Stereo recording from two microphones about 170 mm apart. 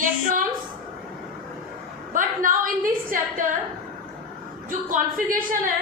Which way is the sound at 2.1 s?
50° right (ahead or behind).